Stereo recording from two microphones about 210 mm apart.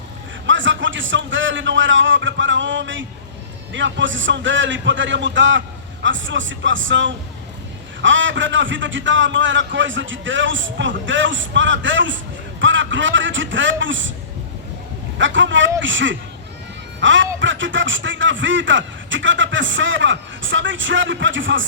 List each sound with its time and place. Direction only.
0.4 s a man's voice: 60° right (ahead or behind)
15.2 s a man's voice: 60° right (ahead or behind)